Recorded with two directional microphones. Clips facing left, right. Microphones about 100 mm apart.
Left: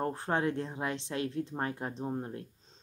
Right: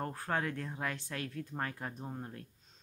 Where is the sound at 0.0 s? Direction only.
25° left (ahead or behind).